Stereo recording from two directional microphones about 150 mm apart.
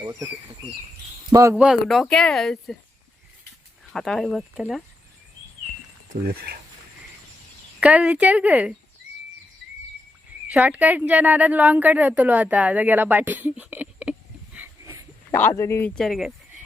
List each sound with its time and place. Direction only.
0.0 s speech: 25° right (ahead or behind)
1.3 s speech: 20° right (ahead or behind)
1.5 s speech: 5° right (ahead or behind)
3.9 s speech: centre (ahead or behind)
6.2 s speech: 90° right
7.8 s speech: 10° right (ahead or behind)
10.5 s speech: 10° right (ahead or behind)
15.3 s speech: 15° left (ahead or behind)
16.0 s speech: centre (ahead or behind)